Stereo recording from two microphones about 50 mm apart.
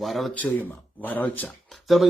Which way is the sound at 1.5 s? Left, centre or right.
Centre.